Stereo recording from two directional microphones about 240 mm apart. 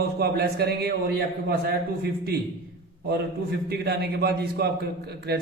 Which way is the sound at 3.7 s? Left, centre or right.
Right.